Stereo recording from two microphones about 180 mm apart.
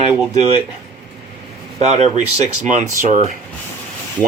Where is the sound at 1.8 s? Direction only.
40° right (ahead or behind).